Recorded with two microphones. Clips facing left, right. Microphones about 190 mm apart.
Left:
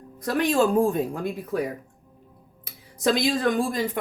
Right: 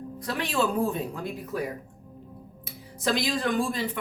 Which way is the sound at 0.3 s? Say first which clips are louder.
Left 6 dB; 45° left (ahead or behind).